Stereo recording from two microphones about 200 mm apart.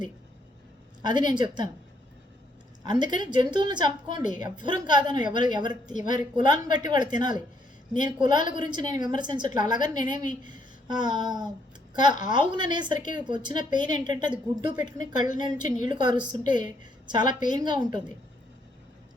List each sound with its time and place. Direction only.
1.0 s a woman's voice: 20° right (ahead or behind)
2.8 s a woman's voice: 20° right (ahead or behind)